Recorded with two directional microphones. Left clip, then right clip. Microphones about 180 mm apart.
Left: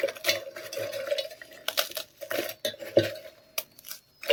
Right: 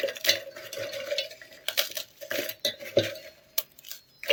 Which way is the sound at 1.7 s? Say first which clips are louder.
Right 1 dB; 15° left (ahead or behind).